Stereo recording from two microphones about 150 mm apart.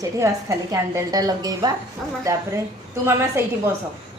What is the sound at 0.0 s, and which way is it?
A woman's voice, 20° right (ahead or behind).